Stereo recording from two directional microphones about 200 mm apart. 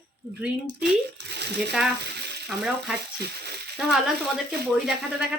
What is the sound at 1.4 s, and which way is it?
Speech, 55° right (ahead or behind).